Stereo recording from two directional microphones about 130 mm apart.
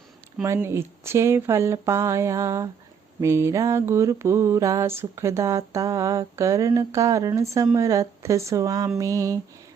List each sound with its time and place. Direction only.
0.4 s mantra: 20° right (ahead or behind)